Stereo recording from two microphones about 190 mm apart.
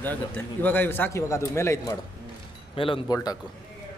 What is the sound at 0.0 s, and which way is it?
A man's voice, 10° left (ahead or behind).